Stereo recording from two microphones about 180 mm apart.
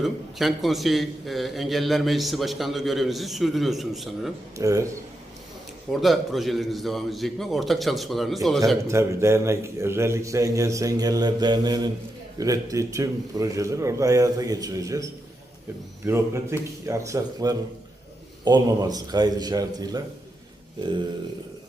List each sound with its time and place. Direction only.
0.0 s a man's voice: centre (ahead or behind)
4.5 s a man's voice: 20° right (ahead or behind)
5.9 s a man's voice: centre (ahead or behind)
8.9 s a man's voice: 15° right (ahead or behind)